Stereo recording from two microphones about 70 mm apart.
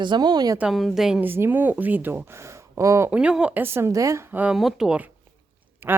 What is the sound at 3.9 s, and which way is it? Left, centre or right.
Speech, right.